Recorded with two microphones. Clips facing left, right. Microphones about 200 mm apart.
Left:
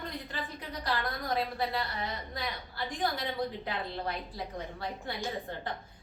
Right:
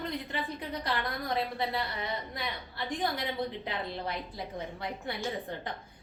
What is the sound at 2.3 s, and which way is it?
A woman's voice, 20° right (ahead or behind).